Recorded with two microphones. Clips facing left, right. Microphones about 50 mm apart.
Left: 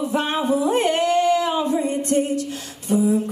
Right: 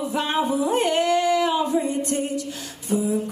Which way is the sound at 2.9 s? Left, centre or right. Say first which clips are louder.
Left 4 dB; left.